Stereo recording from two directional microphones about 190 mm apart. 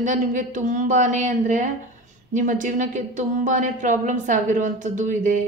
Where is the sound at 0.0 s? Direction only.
45° right (ahead or behind).